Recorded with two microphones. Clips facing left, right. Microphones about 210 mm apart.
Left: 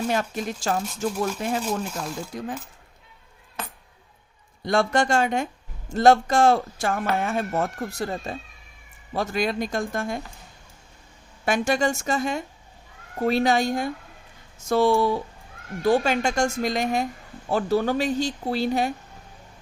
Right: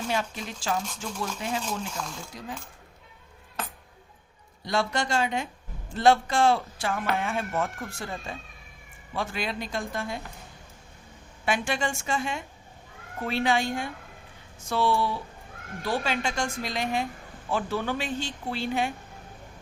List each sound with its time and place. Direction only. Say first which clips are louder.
0.1 s a woman's voice: left 5 dB; 45° left (ahead or behind)
4.6 s a woman's voice: left 6 dB; 50° left (ahead or behind)
11.4 s a woman's voice: left 6 dB; 40° left (ahead or behind)